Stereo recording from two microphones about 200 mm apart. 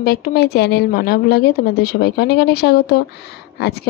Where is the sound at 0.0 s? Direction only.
50° left (ahead or behind).